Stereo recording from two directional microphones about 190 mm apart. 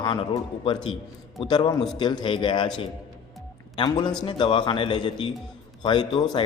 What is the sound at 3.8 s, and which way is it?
A man's voice, 25° left (ahead or behind).